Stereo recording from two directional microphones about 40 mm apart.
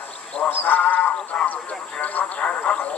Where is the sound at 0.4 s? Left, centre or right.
Left.